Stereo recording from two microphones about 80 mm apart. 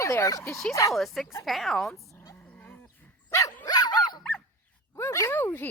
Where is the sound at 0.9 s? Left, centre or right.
Centre.